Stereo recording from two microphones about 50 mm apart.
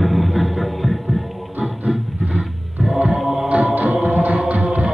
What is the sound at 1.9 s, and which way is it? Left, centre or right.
Roaring cats, centre.